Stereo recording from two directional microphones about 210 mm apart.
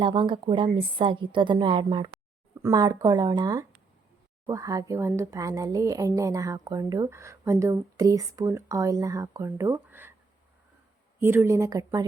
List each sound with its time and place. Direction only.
0.0 s a woman's voice: 20° right (ahead or behind)
11.2 s speech: 10° right (ahead or behind)